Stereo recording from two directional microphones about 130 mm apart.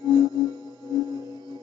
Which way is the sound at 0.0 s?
30° right (ahead or behind).